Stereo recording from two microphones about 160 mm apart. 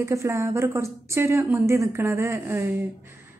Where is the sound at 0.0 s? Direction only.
20° right (ahead or behind).